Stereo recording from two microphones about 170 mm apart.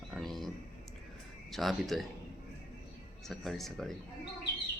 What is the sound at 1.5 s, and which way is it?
Speech, centre (ahead or behind).